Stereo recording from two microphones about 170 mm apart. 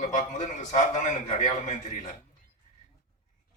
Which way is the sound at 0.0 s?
45° left (ahead or behind).